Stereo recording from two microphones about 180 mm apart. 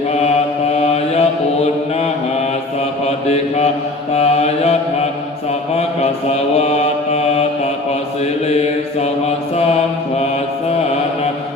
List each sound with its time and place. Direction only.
0.8 s mantra: 35° left (ahead or behind)
3.2 s mantra: 35° left (ahead or behind)